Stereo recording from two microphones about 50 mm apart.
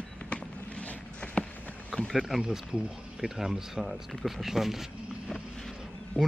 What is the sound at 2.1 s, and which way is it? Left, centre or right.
Speech, centre.